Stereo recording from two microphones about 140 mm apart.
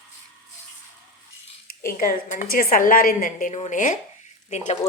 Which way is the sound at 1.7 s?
90° left.